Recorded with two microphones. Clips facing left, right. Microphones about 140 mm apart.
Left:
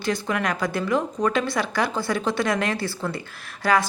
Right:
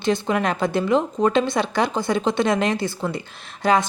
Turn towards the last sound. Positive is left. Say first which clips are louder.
# right 2 dB
turn(degrees=-20)  # may be behind; listen again after turning